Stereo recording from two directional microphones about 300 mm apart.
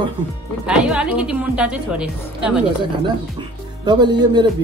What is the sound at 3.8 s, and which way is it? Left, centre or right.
Speech, centre.